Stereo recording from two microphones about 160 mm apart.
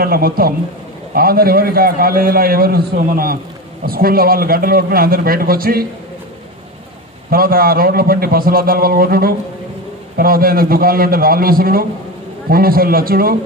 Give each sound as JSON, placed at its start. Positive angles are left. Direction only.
{"t": 0.0, "sound": "a man's voice", "side_deg": -65}
{"t": 7.2, "sound": "a man's voice", "side_deg": -65}